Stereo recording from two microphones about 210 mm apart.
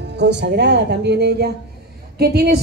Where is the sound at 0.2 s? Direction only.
55° right (ahead or behind).